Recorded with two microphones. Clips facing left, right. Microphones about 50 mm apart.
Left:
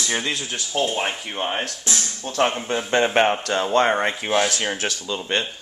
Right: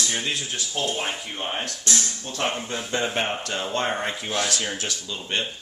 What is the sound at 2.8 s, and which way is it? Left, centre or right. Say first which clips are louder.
Speech: left 7 dB; left.